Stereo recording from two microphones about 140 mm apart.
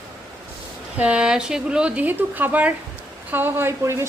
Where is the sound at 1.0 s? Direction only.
10° right (ahead or behind).